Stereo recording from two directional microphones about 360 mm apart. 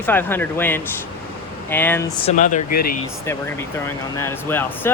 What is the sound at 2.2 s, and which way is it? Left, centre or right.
Speech, left.